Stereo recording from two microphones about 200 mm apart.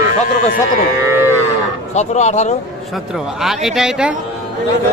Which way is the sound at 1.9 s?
35° left (ahead or behind).